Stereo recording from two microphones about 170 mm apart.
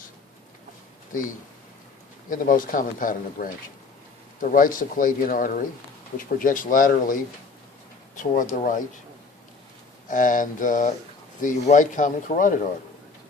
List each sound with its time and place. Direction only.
2.3 s speech: 50° left (ahead or behind)
10.1 s speech: 50° left (ahead or behind)